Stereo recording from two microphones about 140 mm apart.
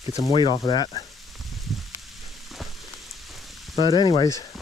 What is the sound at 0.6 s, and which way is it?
Sizzle, 30° left (ahead or behind).